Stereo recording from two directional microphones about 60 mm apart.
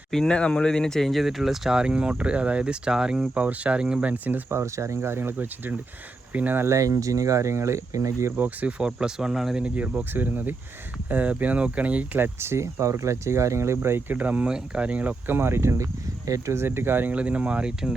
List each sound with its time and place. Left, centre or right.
0.1 s speech: centre
4.1 s speech: right
4.5 s speech: right
6.7 s speech: right
8.4 s speech: right
8.8 s speech: centre
9.6 s speech: right
12.2 s speech: right
14.1 s speech: right
15.4 s speech: right
16.6 s speech: right; by 17.9 s centre